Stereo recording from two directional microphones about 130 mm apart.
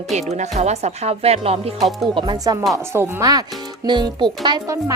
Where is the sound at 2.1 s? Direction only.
35° right (ahead or behind).